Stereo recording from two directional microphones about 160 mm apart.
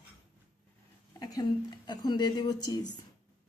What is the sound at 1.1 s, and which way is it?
Speech, 25° left (ahead or behind).